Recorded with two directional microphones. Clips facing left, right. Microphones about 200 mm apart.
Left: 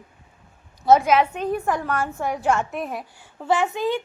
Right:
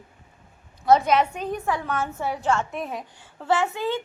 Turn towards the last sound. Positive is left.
turn(degrees=15)  # may be behind; listen again after turning